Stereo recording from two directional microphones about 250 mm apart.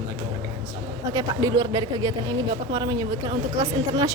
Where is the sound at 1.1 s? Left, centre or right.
Centre.